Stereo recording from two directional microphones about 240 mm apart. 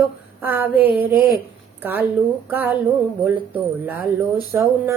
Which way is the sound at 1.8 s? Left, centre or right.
Centre.